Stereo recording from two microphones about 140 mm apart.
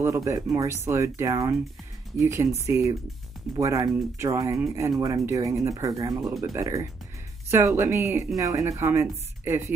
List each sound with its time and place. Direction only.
0.0 s speech: 20° right (ahead or behind)